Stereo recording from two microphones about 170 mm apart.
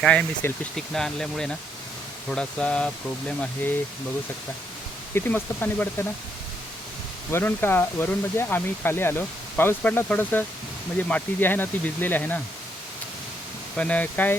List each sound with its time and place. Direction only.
0.0 s speech: 5° left (ahead or behind)
5.1 s speech: 15° left (ahead or behind)
7.3 s speech: 15° left (ahead or behind)
13.7 s speech: 10° left (ahead or behind)